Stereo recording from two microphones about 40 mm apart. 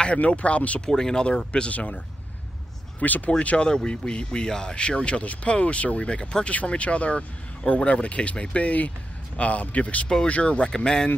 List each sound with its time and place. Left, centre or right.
0.0 s speech: left
0.7 s speech: centre
1.7 s speech: left
3.0 s speech: left
3.3 s speech: left